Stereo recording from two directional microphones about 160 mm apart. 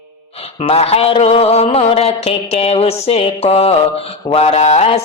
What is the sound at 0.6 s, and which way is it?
Music, 40° left (ahead or behind).